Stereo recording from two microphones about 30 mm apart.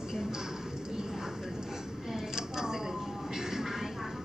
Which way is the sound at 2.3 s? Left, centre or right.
Centre.